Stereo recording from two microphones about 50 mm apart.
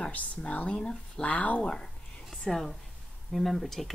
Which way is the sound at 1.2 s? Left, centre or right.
Left.